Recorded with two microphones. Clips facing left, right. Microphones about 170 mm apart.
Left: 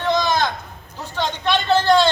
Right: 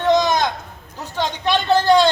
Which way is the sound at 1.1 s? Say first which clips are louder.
Right 1 dB; 10° right (ahead or behind).